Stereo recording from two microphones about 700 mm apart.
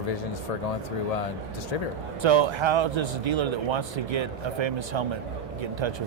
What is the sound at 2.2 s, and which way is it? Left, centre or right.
A man's voice, right.